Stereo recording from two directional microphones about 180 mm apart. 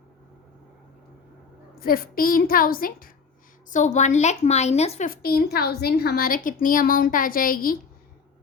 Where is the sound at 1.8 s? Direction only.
55° left (ahead or behind); by 5.1 s 35° left (ahead or behind).